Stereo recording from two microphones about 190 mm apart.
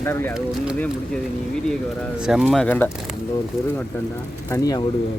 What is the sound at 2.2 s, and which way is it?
Speech, 5° right (ahead or behind).